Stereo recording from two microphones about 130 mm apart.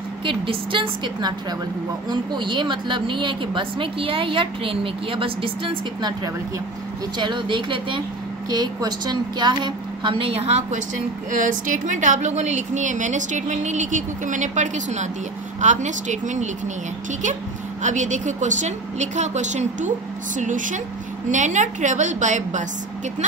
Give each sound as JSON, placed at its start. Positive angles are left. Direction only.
{"t": 0.2, "sound": "speech", "side_deg": -40}
{"t": 7.2, "sound": "speech", "side_deg": -35}
{"t": 11.3, "sound": "a woman's voice", "side_deg": -85}
{"t": 17.8, "sound": "a woman's voice", "side_deg": -70}
{"t": 20.3, "sound": "a woman's voice", "side_deg": -80}